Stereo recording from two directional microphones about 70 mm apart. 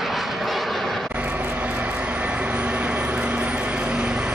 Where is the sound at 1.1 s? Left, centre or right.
Right.